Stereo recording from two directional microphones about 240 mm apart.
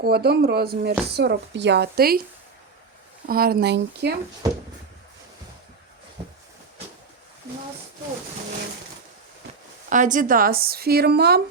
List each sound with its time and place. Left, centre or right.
0.0 s speech: right
3.2 s speech: right
9.9 s speech: right